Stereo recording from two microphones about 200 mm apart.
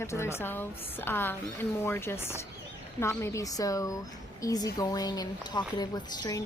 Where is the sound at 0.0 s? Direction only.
15° left (ahead or behind).